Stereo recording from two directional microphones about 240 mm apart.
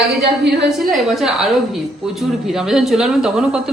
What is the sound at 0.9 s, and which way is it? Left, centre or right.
Speech, centre.